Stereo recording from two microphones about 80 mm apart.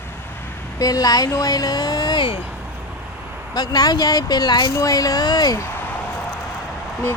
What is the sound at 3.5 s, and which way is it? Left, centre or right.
Speech, left.